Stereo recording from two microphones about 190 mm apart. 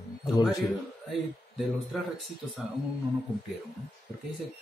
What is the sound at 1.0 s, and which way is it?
Speech, centre (ahead or behind).